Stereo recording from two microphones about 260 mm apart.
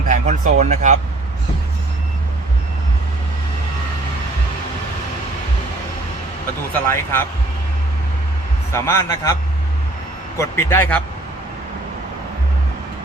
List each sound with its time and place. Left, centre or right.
0.1 s speech: right
6.8 s a man's voice: centre
8.7 s a man's voice: centre
10.3 s a man's voice: centre